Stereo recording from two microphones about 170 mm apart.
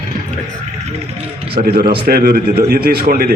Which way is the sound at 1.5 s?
65° right (ahead or behind).